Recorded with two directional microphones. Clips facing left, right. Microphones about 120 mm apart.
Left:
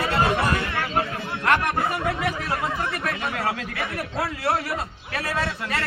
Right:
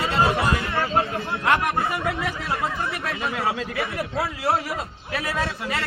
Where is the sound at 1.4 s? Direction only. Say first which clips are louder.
Even; 20° right (ahead or behind).